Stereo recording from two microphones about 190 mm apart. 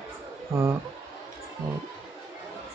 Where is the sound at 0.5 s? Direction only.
15° right (ahead or behind).